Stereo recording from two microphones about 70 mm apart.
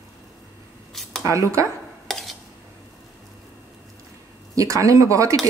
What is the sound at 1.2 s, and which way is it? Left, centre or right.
Speech, right.